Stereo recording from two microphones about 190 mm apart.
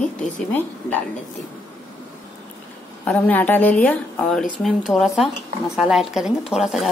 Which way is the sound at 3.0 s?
10° left (ahead or behind).